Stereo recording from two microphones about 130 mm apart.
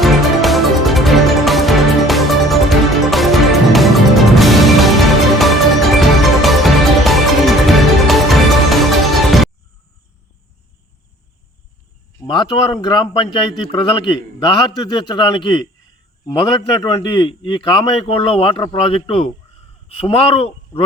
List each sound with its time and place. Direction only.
0.0 s music: centre (ahead or behind)
12.3 s a man's voice: 35° left (ahead or behind)